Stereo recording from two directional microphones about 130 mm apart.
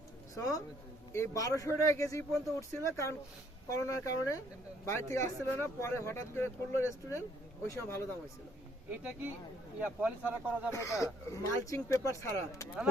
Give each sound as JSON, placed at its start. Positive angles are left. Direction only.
{"t": 1.1, "sound": "speech", "side_deg": 25}
{"t": 8.9, "sound": "speech", "side_deg": -15}
{"t": 10.7, "sound": "speech", "side_deg": 20}